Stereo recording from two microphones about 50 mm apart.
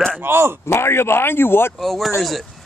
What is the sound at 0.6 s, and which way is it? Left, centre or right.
Speech, left.